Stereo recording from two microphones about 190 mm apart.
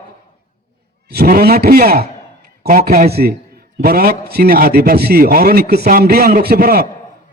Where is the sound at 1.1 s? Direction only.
55° right (ahead or behind).